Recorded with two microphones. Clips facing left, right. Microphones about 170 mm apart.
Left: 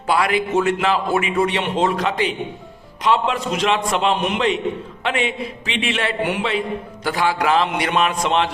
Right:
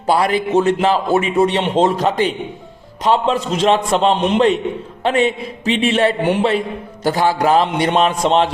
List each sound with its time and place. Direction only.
0.1 s a man's voice: 35° right (ahead or behind)
5.0 s a man's voice: 40° right (ahead or behind)